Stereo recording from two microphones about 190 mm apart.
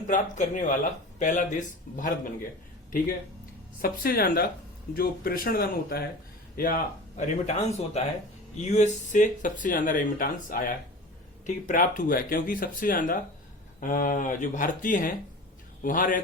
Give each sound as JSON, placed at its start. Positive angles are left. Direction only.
{"t": 0.1, "sound": "speech", "side_deg": 40}
{"t": 3.8, "sound": "speech", "side_deg": 50}